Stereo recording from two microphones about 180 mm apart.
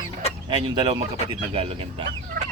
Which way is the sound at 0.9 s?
35° right (ahead or behind).